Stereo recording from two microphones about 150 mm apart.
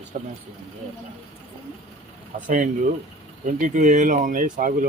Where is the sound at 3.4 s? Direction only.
55° right (ahead or behind).